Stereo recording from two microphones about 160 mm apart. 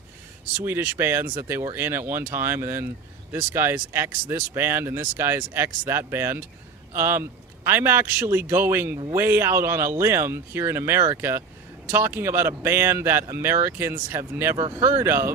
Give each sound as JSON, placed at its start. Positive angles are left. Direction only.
{"t": 0.5, "sound": "speech", "side_deg": -15}